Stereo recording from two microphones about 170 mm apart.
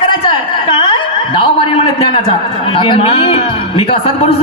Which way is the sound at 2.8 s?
30° left (ahead or behind).